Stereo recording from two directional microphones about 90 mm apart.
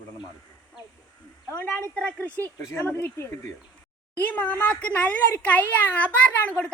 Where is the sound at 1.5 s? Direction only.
15° left (ahead or behind).